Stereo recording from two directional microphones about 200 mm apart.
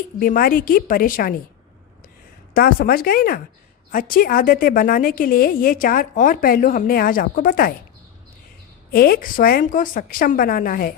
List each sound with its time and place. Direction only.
0.2 s a woman's voice: 45° left (ahead or behind)
2.5 s a woman's voice: 45° left (ahead or behind)
8.9 s a woman's voice: 50° left (ahead or behind)